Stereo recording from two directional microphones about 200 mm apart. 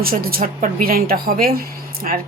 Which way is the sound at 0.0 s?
50° right (ahead or behind).